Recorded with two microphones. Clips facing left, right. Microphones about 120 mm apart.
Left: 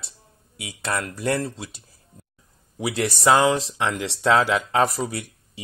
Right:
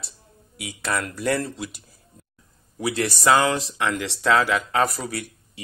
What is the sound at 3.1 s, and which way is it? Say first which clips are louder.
Speech: left 1 dB; 25° left (ahead or behind).